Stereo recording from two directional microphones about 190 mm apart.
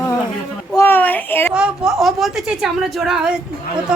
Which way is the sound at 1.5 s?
5° right (ahead or behind).